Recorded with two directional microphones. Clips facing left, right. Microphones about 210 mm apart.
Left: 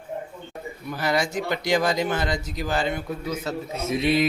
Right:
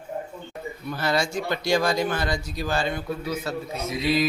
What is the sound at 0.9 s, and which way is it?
Speech, 15° left (ahead or behind).